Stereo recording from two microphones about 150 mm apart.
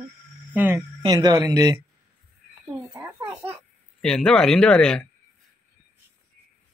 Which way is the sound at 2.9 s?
15° right (ahead or behind).